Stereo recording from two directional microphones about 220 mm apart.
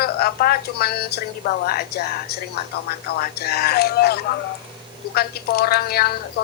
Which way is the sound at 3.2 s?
45° left (ahead or behind).